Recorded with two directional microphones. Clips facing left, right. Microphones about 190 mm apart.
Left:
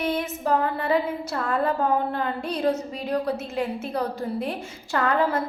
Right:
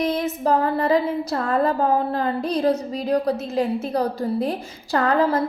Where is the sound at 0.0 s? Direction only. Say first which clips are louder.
Right 4 dB; 40° right (ahead or behind).